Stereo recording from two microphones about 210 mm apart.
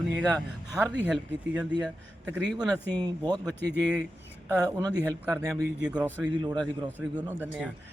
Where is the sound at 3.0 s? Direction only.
20° right (ahead or behind).